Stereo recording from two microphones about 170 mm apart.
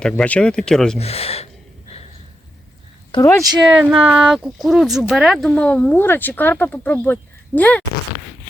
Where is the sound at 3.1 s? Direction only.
20° left (ahead or behind).